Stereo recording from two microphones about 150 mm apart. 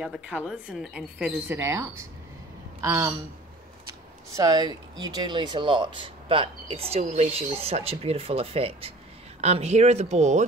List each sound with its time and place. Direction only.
0.0 s a woman's voice: 5° right (ahead or behind)
1.6 s speech: 20° right (ahead or behind)
4.4 s speech: 25° right (ahead or behind); by 10.4 s 50° right (ahead or behind)